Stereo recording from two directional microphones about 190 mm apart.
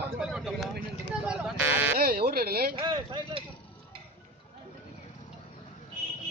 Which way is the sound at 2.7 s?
25° right (ahead or behind).